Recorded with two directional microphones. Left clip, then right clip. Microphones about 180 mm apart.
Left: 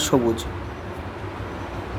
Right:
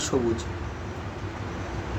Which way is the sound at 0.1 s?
55° left (ahead or behind).